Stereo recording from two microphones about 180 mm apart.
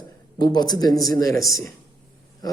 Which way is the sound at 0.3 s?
25° left (ahead or behind).